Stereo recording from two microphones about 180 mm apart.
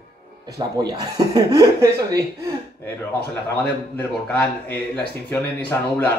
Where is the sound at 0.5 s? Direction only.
20° right (ahead or behind).